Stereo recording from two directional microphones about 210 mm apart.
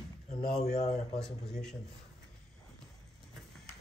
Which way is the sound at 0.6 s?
30° left (ahead or behind).